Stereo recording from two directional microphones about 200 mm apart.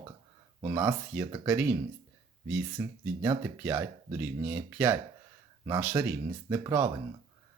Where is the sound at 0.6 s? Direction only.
15° right (ahead or behind).